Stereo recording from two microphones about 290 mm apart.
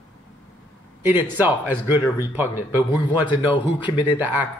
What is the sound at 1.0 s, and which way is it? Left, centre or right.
Speech, centre.